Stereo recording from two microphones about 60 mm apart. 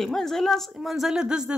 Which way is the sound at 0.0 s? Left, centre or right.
Centre.